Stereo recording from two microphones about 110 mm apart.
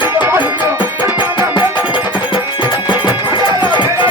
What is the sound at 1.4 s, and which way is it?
Music, 45° left (ahead or behind).